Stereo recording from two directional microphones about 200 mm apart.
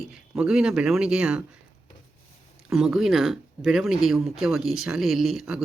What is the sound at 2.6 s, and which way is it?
Speech, centre (ahead or behind).